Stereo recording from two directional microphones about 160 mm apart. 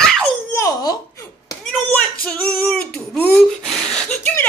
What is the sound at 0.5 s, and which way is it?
Babbling, 20° left (ahead or behind).